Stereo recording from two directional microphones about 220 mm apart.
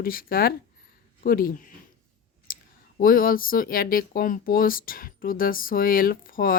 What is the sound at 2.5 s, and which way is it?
Clicking, 40° left (ahead or behind).